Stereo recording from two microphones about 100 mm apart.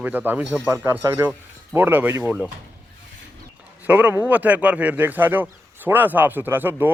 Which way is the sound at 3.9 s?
20° right (ahead or behind).